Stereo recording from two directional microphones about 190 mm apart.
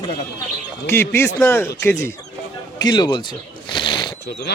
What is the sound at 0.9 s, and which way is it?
Speech, 10° left (ahead or behind).